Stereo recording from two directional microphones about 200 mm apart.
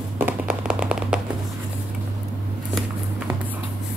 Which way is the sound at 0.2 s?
5° right (ahead or behind).